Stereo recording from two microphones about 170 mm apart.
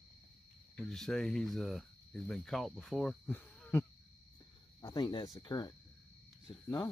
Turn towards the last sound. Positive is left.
turn(degrees=20)  # may be behind; listen again after turning